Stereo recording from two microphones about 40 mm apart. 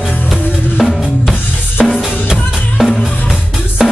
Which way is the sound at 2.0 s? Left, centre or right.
Centre.